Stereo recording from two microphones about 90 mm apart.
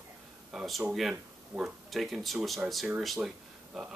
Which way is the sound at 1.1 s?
15° right (ahead or behind).